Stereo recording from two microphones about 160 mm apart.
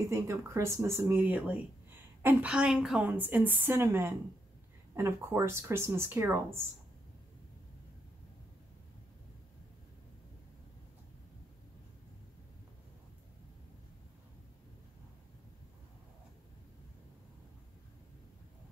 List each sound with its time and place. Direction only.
0.1 s a woman's voice: 20° right (ahead or behind)